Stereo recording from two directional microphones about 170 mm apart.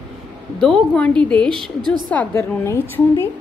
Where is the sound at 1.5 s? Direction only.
30° right (ahead or behind).